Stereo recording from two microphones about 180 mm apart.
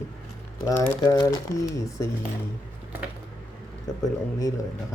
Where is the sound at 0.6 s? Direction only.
20° left (ahead or behind).